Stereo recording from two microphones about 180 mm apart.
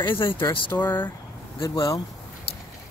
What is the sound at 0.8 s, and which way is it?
Speech, 10° left (ahead or behind).